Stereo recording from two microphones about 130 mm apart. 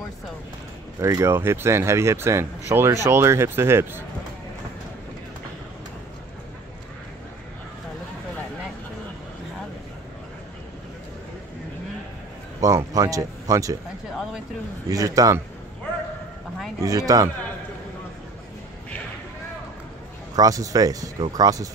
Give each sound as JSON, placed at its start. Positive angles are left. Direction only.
{"t": 1.0, "sound": "speech", "side_deg": -25}
{"t": 12.5, "sound": "speech", "side_deg": -25}
{"t": 14.9, "sound": "speech", "side_deg": -25}
{"t": 16.8, "sound": "speech", "side_deg": -25}
{"t": 20.3, "sound": "speech", "side_deg": -25}